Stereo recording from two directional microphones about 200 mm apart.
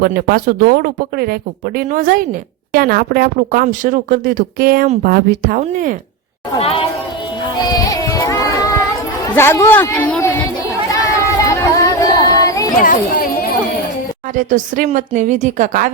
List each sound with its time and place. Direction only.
0.0 s speech: 50° right (ahead or behind)
6.6 s speech: 30° left (ahead or behind)
7.6 s child singing: 20° left (ahead or behind)
9.3 s speech: 10° left (ahead or behind)
11.4 s chatter: 15° left (ahead or behind)
12.8 s speech: 45° left (ahead or behind)
14.3 s a woman's voice: 40° right (ahead or behind)